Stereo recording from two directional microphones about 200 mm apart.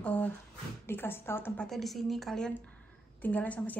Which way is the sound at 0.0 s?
10° left (ahead or behind).